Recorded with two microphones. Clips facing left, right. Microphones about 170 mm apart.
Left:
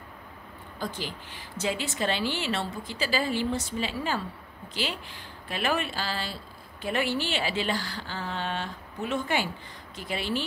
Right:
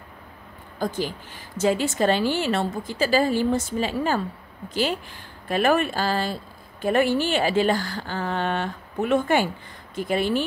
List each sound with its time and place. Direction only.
0.7 s speech: 45° right (ahead or behind)
5.5 s speech: 50° right (ahead or behind)